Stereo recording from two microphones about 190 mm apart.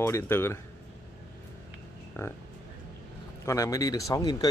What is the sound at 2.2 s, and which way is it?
Speech, 10° left (ahead or behind).